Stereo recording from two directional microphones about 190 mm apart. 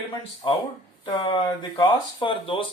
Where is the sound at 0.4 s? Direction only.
25° left (ahead or behind).